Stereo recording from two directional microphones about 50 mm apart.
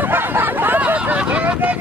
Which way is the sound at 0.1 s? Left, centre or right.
Right.